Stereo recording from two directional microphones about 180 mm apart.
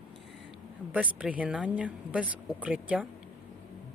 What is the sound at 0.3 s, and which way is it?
Speech, 5° right (ahead or behind).